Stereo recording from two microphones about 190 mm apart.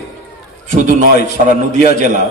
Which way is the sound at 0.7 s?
45° right (ahead or behind).